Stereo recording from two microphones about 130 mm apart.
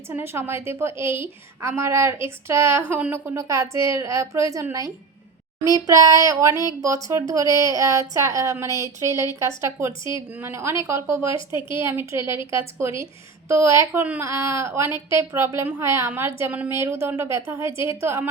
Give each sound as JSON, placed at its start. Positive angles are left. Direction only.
{"t": 0.1, "sound": "a woman's voice", "side_deg": -20}